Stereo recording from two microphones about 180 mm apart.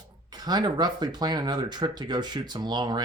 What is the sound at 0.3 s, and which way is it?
Speech, 20° right (ahead or behind).